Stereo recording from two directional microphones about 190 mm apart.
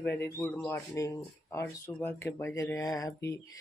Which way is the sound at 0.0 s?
10° left (ahead or behind).